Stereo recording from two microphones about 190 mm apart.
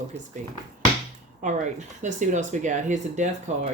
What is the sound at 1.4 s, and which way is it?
Speech, 40° right (ahead or behind).